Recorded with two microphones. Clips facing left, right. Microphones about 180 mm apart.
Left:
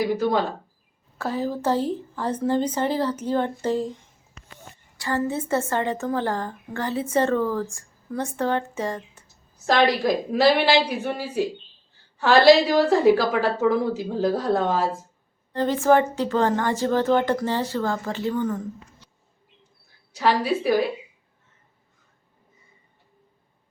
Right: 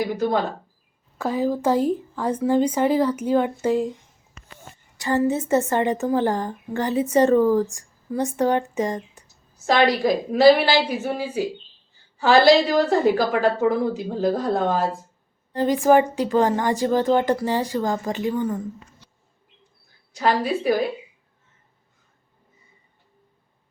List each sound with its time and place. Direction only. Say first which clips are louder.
1.2 s a woman's voice: right 4 dB; 15° right (ahead or behind)
4.9 s a woman's voice: right 4 dB; 20° right (ahead or behind)
9.6 s a woman's voice: right 1 dB; centre (ahead or behind)
15.5 s a woman's voice: right 2 dB; 15° right (ahead or behind)
20.1 s a woman's voice: even; centre (ahead or behind)